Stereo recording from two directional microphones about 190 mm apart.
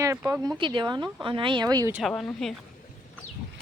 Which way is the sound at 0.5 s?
25° right (ahead or behind).